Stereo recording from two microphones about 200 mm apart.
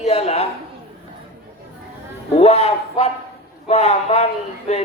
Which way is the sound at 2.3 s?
30° left (ahead or behind).